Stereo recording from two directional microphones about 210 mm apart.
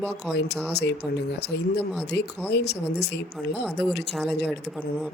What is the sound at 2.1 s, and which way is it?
A woman's voice, 55° left (ahead or behind).